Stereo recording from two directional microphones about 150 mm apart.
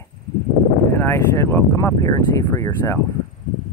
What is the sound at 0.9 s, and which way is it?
Speech, 20° left (ahead or behind).